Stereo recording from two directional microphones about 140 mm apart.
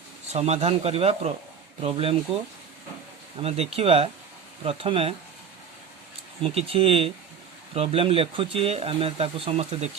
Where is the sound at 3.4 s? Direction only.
45° right (ahead or behind).